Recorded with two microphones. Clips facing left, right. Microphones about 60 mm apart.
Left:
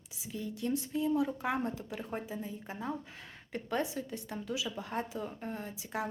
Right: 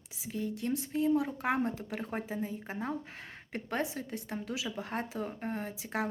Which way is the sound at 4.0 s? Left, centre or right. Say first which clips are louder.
Right 1 dB; right.